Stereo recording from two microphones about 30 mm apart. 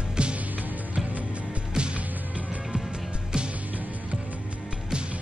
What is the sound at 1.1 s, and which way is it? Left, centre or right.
Music, right.